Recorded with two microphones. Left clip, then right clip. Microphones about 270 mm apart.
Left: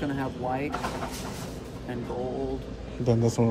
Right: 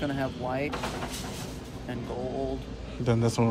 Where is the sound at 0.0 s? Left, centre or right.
Centre.